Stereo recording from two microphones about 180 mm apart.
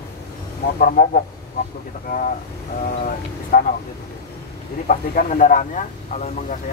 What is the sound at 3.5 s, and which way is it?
Speech, 50° left (ahead or behind).